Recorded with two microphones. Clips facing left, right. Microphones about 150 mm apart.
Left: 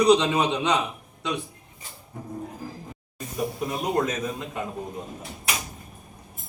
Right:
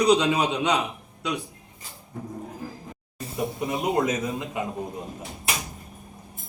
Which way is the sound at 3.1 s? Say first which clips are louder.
Even; 25° right (ahead or behind).